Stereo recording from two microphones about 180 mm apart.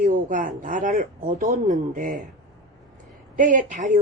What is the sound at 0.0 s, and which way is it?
Speech, 50° right (ahead or behind).